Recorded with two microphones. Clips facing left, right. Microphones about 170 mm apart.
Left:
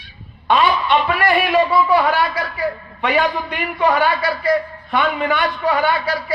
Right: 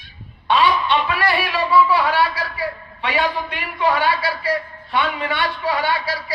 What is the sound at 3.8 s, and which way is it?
A man's voice, 40° left (ahead or behind).